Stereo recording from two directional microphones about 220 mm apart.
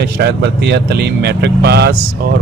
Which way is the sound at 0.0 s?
50° right (ahead or behind).